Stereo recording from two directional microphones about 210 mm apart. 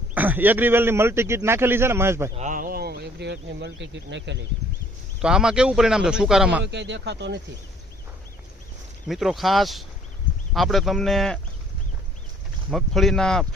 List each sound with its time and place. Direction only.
0.1 s a man's voice: 10° right (ahead or behind)
2.3 s speech: 35° right (ahead or behind); by 4.4 s 60° right (ahead or behind)
5.2 s speech: 5° right (ahead or behind)
6.6 s speech: 55° right (ahead or behind)
9.0 s speech: centre (ahead or behind)
12.7 s speech: centre (ahead or behind)